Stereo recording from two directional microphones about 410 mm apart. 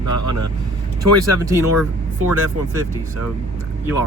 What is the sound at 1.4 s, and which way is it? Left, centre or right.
Speech, centre.